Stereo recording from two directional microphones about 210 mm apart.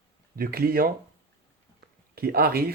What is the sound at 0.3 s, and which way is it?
Speech, 45° right (ahead or behind).